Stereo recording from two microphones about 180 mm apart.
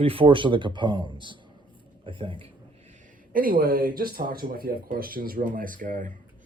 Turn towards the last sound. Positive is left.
turn(degrees=-45)  # may be behind; listen again after turning